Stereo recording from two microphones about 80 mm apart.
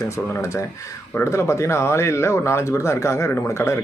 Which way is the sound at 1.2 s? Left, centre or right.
Left.